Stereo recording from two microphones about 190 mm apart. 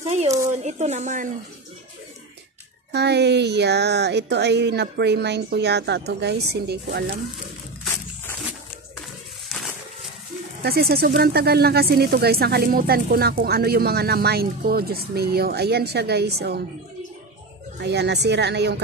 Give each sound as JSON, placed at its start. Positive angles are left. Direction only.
{"t": 0.0, "sound": "speech", "side_deg": -35}
{"t": 2.9, "sound": "speech", "side_deg": -60}
{"t": 10.6, "sound": "speech", "side_deg": -55}
{"t": 17.7, "sound": "speech", "side_deg": -65}